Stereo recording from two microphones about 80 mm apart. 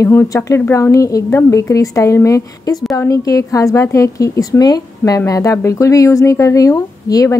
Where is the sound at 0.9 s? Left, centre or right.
Left.